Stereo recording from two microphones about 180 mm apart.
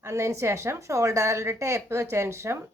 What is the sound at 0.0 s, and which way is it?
A woman's voice, 15° right (ahead or behind).